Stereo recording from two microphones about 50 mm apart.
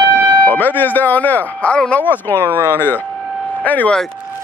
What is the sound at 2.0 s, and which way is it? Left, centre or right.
Speech, left.